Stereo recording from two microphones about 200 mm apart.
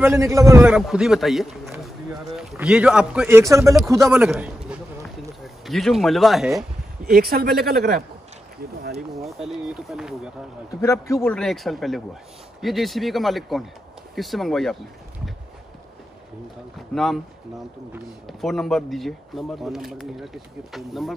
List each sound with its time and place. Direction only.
0.0 s speech: 15° right (ahead or behind)
4.6 s a sound: centre (ahead or behind)
7.1 s speech: 50° right (ahead or behind)
9.1 s speech: centre (ahead or behind)
10.8 s a man's voice: 15° left (ahead or behind)
11.3 s speech: centre (ahead or behind)
16.7 s speech: centre (ahead or behind)
18.2 s speech: centre (ahead or behind)